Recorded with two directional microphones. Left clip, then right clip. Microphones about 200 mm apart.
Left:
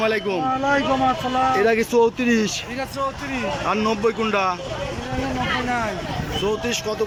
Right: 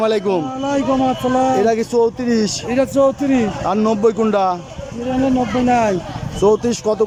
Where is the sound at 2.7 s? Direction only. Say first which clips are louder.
Right 11 dB; 60° right (ahead or behind).